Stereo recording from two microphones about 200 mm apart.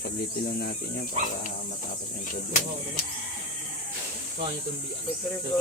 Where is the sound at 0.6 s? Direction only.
45° left (ahead or behind).